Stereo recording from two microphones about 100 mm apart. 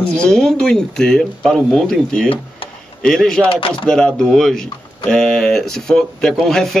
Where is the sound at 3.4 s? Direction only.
65° left (ahead or behind).